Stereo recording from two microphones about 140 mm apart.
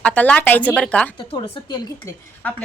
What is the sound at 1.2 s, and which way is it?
Speech, 40° left (ahead or behind).